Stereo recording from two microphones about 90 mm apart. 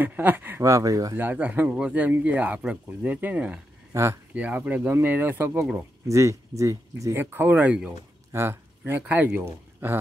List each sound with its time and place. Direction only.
0.0 s speech: 20° right (ahead or behind)
0.6 s speech: 35° right (ahead or behind)
1.1 s speech: 20° right (ahead or behind)
3.9 s speech: 30° right (ahead or behind)
4.3 s speech: 15° right (ahead or behind); by 7.2 s 35° right (ahead or behind)
7.2 s speech: 20° right (ahead or behind)
8.3 s a sound: 25° right (ahead or behind)
9.0 s speech: 20° right (ahead or behind)